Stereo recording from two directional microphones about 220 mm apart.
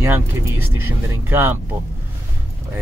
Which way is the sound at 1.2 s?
10° right (ahead or behind).